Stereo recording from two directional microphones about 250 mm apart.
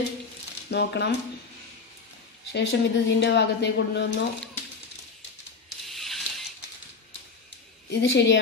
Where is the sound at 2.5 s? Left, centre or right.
Left.